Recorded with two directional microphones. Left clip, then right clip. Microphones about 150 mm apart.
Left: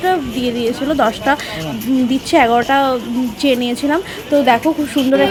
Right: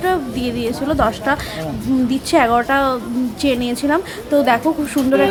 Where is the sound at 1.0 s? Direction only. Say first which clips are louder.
Left 3 dB; 15° left (ahead or behind).